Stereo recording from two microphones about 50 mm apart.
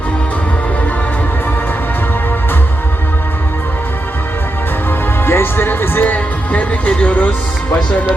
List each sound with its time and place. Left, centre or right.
5.2 s music: left
6.1 s music: left